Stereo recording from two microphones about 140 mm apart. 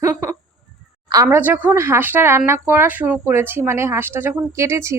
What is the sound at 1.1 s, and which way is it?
Speech, 25° right (ahead or behind).